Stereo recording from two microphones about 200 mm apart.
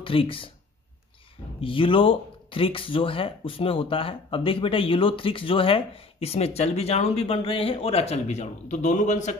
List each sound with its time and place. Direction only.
0.0 s speech: 25° left (ahead or behind)
1.6 s speech: 25° left (ahead or behind)